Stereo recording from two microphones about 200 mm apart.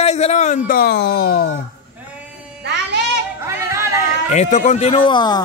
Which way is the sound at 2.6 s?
60° right (ahead or behind).